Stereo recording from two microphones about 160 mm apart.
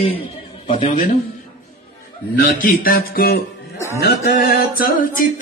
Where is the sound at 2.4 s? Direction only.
60° left (ahead or behind).